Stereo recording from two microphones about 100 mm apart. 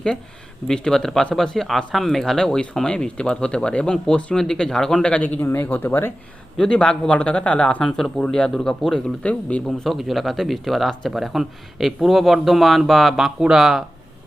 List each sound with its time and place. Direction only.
0.7 s speech: 5° left (ahead or behind)
5.4 s speech: 20° left (ahead or behind)
6.6 s speech: 10° left (ahead or behind)
9.8 s speech: centre (ahead or behind)